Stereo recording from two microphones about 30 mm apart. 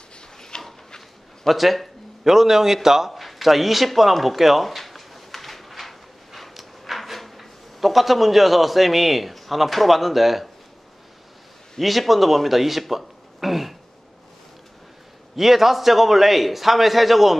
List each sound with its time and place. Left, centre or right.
0.4 s a sound: centre
1.5 s a man's voice: centre
2.2 s speech: centre
3.1 s speech: centre
4.4 s a sound: centre
6.9 s a man's voice: centre
11.8 s speech: centre
15.3 s a man's voice: centre